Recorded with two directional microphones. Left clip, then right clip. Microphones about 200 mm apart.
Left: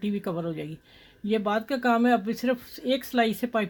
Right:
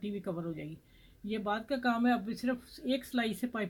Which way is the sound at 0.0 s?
55° left (ahead or behind).